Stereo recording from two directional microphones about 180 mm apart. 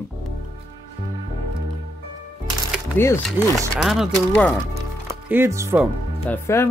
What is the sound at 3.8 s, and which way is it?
Speech, centre (ahead or behind).